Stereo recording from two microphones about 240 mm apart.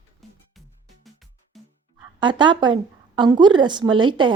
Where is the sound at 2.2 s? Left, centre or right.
Centre.